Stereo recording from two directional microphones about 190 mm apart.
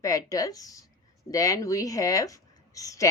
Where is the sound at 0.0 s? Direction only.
15° left (ahead or behind).